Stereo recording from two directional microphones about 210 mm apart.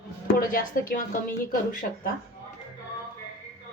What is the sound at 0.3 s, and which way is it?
Speech, 45° left (ahead or behind).